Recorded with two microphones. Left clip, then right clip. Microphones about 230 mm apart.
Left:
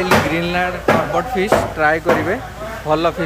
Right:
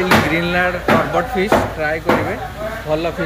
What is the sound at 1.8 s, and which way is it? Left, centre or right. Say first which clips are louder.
Speech: left 5 dB; centre.